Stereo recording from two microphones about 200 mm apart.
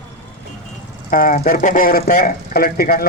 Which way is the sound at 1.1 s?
45° left (ahead or behind).